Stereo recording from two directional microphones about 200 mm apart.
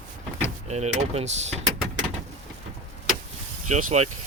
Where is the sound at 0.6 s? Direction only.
35° right (ahead or behind).